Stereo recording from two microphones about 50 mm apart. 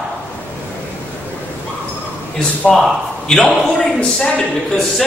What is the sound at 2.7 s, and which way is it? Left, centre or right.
A man's voice, centre.